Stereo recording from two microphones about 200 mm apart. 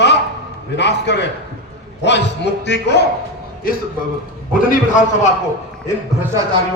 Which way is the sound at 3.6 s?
45° left (ahead or behind).